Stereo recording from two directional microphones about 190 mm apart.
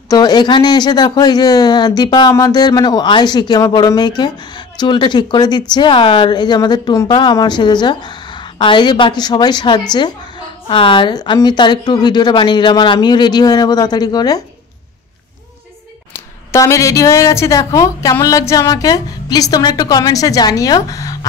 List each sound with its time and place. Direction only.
0.1 s speech: 20° left (ahead or behind)
16.5 s speech: 15° left (ahead or behind)